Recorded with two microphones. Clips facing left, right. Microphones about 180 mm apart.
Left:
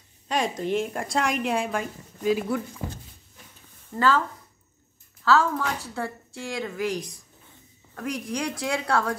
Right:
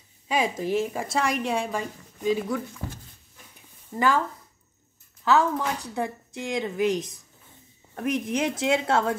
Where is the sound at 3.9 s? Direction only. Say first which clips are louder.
Left 1 dB; 15° right (ahead or behind).